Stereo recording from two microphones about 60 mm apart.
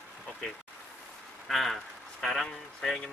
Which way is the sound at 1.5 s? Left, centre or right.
Centre.